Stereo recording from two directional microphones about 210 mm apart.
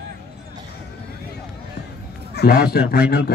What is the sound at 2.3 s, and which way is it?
A man's voice, 50° left (ahead or behind).